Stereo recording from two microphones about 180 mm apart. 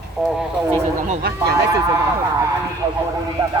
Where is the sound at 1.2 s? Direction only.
60° right (ahead or behind).